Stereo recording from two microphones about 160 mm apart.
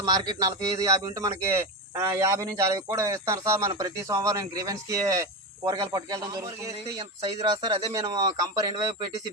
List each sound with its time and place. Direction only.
0.0 s a man's voice: 25° right (ahead or behind)